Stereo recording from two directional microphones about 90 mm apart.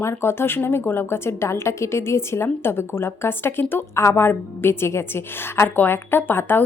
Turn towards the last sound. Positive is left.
turn(degrees=25)  # may be behind; listen again after turning